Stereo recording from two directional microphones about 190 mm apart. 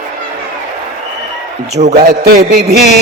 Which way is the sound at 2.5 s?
60° right (ahead or behind).